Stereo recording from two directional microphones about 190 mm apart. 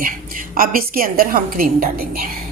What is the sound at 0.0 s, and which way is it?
A woman's voice, 50° right (ahead or behind).